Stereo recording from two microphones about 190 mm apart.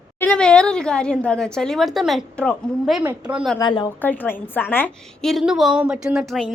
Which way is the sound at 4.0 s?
10° left (ahead or behind).